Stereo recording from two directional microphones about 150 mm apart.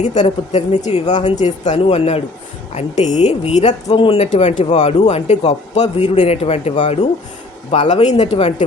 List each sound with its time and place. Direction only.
0.0 s speech: 50° left (ahead or behind)